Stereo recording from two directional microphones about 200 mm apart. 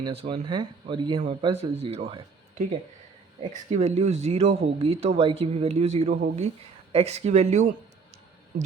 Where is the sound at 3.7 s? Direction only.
35° right (ahead or behind).